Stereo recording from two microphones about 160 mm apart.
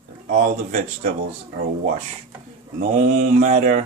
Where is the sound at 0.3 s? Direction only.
50° right (ahead or behind).